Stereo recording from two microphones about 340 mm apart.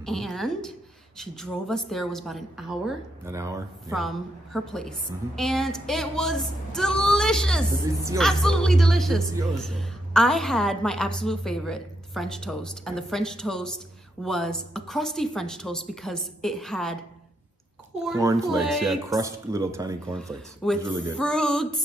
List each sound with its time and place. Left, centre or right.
0.0 s a woman's voice: centre
7.8 s a woman's voice: centre
18.0 s a woman's voice: centre
20.2 s a woman's voice: centre